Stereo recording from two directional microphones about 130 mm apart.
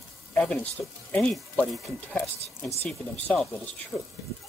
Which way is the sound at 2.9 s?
10° left (ahead or behind).